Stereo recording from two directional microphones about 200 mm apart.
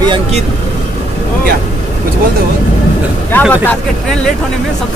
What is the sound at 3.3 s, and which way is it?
Speech, 5° left (ahead or behind).